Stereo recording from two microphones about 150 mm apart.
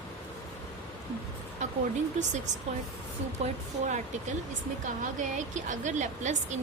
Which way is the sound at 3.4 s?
45° right (ahead or behind).